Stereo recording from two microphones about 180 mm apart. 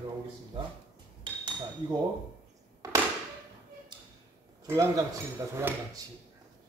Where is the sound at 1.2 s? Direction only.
25° right (ahead or behind).